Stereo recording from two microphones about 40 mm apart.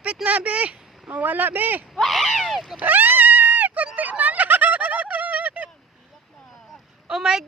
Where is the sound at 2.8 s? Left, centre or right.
Right.